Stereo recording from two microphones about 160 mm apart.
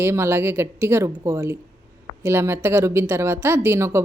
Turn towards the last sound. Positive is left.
turn(degrees=-15)  # may be behind; listen again after turning